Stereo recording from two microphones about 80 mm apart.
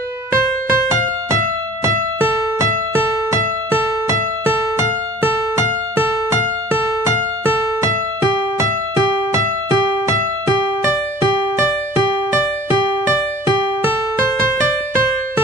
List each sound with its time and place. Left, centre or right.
0.7 s music: right
4.4 s music: right
6.7 s music: right
14.9 s music: right